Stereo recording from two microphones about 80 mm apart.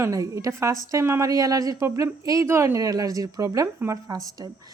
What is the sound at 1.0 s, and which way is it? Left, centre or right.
Speech, right.